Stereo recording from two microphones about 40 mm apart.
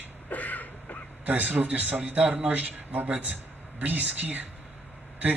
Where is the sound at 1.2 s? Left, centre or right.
Right.